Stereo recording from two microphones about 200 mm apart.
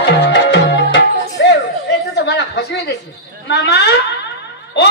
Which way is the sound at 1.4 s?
60° left (ahead or behind).